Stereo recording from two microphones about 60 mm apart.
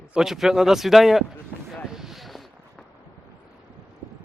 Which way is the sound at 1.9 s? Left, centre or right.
Centre.